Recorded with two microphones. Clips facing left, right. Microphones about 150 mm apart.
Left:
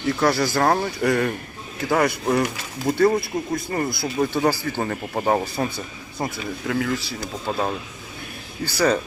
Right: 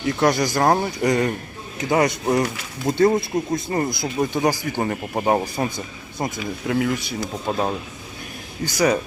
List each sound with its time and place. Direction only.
0.2 s speech: 20° right (ahead or behind)